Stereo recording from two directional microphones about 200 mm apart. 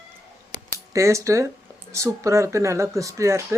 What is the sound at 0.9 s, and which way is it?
Speech, 15° right (ahead or behind).